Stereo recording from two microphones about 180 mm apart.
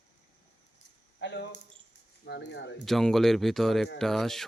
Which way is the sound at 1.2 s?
80° left.